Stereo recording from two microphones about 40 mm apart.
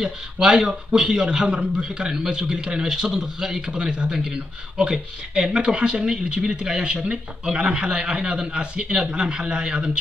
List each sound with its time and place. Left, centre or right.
0.0 s speech: centre